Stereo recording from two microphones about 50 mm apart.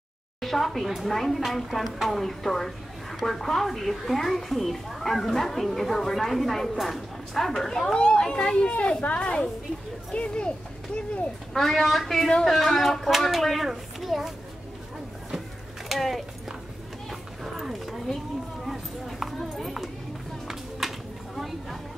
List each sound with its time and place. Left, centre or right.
0.4 s a woman's voice: centre; by 10.5 s left
11.5 s a woman's voice: centre
15.9 s speech: centre
17.1 s a sound: centre